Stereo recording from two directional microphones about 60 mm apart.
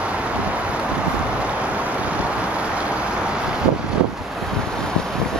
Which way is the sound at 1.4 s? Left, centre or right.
Right.